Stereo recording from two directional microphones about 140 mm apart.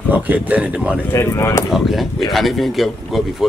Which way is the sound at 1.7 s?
Centre (ahead or behind).